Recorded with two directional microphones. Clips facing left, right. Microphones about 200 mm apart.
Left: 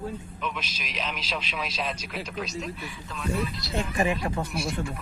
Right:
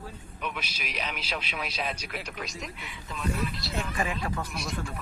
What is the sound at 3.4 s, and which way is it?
Speech, 30° left (ahead or behind).